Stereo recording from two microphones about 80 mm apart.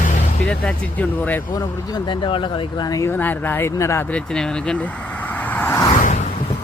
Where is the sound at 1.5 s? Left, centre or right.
Left.